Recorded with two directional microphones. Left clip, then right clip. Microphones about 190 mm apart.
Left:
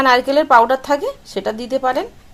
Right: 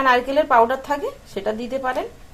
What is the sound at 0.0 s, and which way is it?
A woman's voice, 55° left (ahead or behind).